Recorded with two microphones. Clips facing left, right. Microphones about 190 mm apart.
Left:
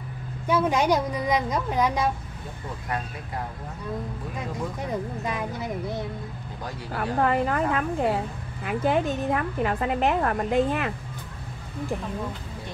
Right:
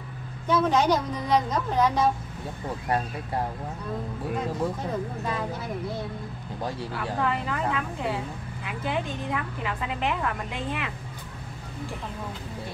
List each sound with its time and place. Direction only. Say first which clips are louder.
0.5 s a woman's voice: even; 10° left (ahead or behind)
5.2 s a woman's voice: left 1 dB; 15° left (ahead or behind)
6.9 s a woman's voice: left 6 dB; 50° left (ahead or behind)